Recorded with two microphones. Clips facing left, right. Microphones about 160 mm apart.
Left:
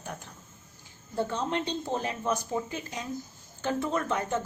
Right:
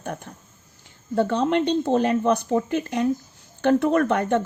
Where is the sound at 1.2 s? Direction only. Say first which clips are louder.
Right 9 dB; 70° right (ahead or behind).